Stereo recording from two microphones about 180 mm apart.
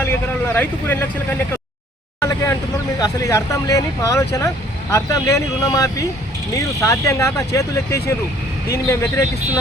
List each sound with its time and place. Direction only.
0.0 s speech: 10° left (ahead or behind)
2.2 s vehicle: 20° left (ahead or behind)
3.0 s speech: 15° left (ahead or behind)